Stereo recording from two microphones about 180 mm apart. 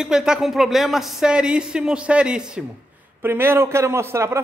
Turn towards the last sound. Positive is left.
turn(degrees=-15)  # may be behind; listen again after turning